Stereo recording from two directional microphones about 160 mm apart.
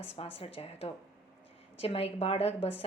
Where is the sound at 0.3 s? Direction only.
40° left (ahead or behind).